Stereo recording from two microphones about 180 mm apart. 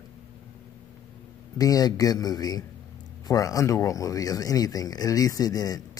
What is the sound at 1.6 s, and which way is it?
Speech, 20° left (ahead or behind).